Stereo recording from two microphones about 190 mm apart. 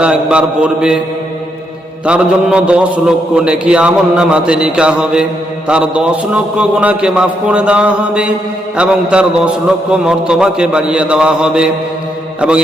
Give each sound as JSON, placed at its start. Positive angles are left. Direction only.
{"t": 0.0, "sound": "a man's voice", "side_deg": -5}
{"t": 2.0, "sound": "a man's voice", "side_deg": -5}